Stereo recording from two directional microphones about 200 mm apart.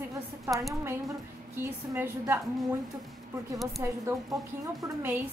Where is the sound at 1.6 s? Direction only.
10° right (ahead or behind).